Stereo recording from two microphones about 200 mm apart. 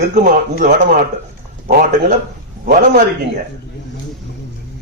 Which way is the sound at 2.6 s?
40° right (ahead or behind).